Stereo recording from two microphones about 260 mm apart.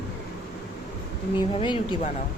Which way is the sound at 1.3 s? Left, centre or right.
Centre.